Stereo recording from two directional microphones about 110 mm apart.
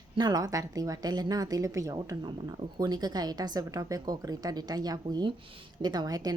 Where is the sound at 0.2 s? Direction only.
35° right (ahead or behind).